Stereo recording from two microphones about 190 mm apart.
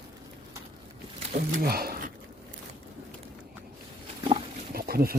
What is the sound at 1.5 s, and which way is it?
Speech, 55° right (ahead or behind).